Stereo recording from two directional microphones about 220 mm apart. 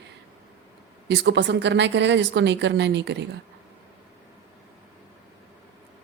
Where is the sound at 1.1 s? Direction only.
55° right (ahead or behind).